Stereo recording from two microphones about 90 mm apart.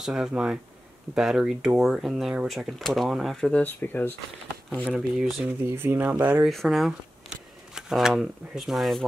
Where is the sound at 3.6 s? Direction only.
20° left (ahead or behind).